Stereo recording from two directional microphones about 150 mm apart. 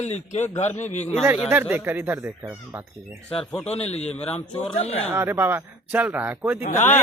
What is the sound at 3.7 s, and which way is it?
Speech, 45° left (ahead or behind).